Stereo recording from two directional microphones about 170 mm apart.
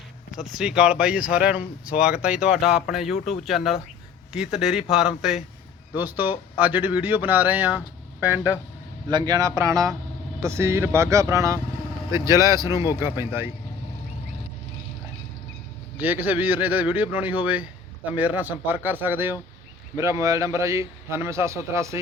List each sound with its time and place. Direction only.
0.3 s a man's voice: 5° right (ahead or behind)
9.0 s speech: 25° right (ahead or behind)
12.7 s a man's voice: 25° left (ahead or behind)
13.0 s speech: 15° right (ahead or behind)
16.0 s speech: 10° right (ahead or behind)